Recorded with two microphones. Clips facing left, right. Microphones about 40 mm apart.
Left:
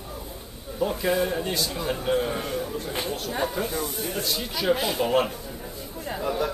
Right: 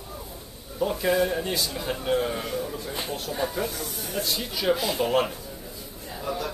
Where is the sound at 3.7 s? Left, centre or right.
Left.